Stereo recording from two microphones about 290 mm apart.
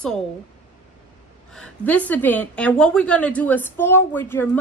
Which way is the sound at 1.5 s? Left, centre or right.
Centre.